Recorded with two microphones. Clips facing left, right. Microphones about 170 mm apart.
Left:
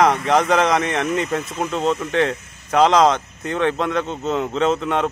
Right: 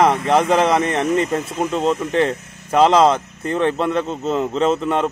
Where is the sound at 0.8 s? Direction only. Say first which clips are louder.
Right 3 dB; 30° right (ahead or behind).